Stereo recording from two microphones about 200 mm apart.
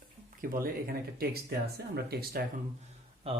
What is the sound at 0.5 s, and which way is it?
Speech, 45° right (ahead or behind).